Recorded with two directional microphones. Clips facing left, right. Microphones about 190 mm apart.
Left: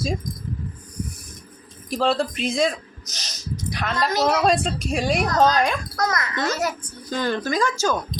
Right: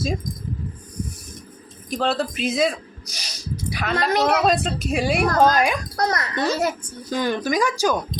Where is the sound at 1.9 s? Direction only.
Centre (ahead or behind).